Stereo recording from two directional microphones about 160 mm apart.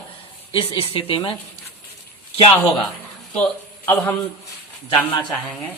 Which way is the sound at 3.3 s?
10° left (ahead or behind).